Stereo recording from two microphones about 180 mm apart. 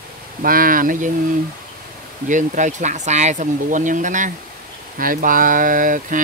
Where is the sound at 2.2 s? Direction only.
45° right (ahead or behind).